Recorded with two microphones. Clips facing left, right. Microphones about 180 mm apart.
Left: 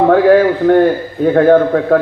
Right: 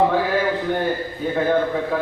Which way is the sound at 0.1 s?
60° left (ahead or behind).